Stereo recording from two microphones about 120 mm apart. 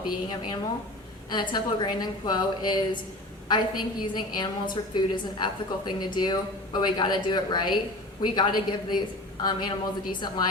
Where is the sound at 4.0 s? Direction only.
40° left (ahead or behind).